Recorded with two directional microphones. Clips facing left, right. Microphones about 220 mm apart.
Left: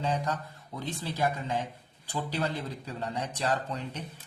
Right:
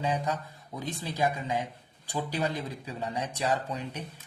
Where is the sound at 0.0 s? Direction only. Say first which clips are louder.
Right 1 dB; 10° right (ahead or behind).